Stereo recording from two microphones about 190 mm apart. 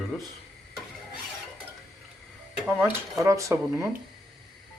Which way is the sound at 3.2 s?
15° right (ahead or behind).